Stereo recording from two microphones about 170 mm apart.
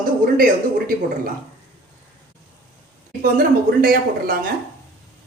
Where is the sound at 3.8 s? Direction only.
55° right (ahead or behind).